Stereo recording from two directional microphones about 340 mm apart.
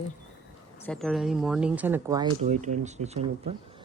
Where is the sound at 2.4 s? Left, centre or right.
Right.